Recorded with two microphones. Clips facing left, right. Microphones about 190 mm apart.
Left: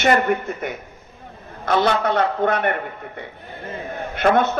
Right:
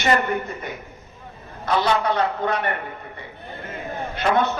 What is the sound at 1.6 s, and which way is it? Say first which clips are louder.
Speech: left 2 dB; 50° left (ahead or behind).